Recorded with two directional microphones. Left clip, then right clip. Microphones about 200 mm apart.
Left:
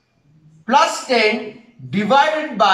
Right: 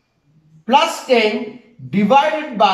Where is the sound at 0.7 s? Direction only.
15° right (ahead or behind).